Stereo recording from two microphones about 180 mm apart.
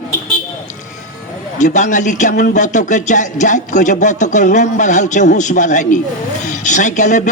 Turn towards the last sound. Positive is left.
turn(degrees=45)  # may be behind; listen again after turning